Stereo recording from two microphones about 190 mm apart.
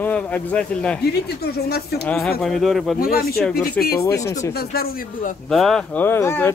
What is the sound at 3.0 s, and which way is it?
Speech, 50° left (ahead or behind).